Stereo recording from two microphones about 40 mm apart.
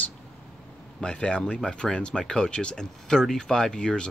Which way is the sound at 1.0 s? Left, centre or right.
Left.